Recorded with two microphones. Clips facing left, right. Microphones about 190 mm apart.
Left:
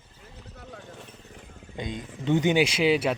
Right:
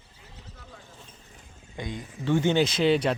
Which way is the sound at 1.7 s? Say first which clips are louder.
Left 1 dB; 20° left (ahead or behind).